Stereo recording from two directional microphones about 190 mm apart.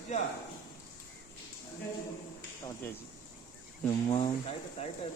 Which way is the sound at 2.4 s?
10° left (ahead or behind).